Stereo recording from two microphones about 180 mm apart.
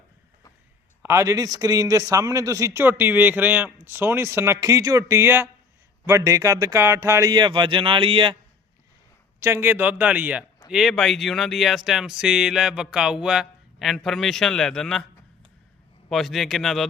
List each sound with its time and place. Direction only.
1.0 s a man's voice: 15° right (ahead or behind)
9.4 s a man's voice: 15° right (ahead or behind); by 15.0 s centre (ahead or behind)
16.0 s speech: centre (ahead or behind)